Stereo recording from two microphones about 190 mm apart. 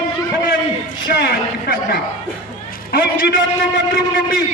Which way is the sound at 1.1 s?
60° left (ahead or behind).